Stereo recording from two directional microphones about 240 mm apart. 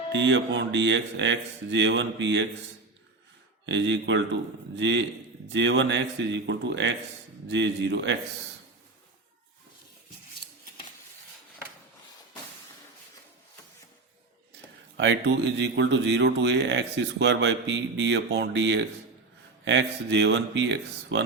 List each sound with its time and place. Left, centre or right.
0.1 s speech: right
3.7 s speech: right
14.9 s speech: right